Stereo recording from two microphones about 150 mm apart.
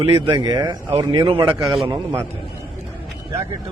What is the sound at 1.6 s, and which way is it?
Speech, centre (ahead or behind).